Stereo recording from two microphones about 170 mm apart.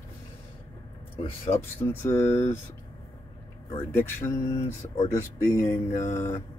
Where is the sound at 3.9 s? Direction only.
15° left (ahead or behind).